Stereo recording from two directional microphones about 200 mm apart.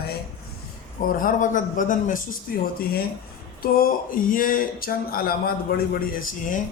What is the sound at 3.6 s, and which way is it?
Speech, 45° left (ahead or behind).